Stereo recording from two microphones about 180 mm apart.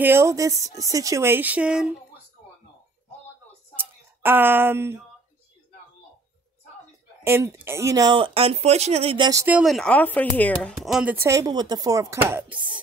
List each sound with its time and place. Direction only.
0.0 s speech: 15° right (ahead or behind)
3.7 s a sound: 10° right (ahead or behind)
7.2 s speech: 15° right (ahead or behind)
9.6 s speech: centre (ahead or behind)
10.8 s speech: 5° right (ahead or behind)